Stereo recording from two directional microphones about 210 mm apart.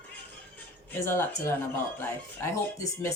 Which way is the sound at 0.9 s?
10° left (ahead or behind).